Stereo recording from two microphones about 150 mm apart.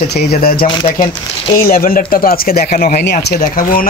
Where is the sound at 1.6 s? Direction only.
75° left (ahead or behind).